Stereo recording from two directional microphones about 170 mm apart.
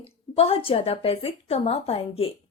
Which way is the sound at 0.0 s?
35° left (ahead or behind).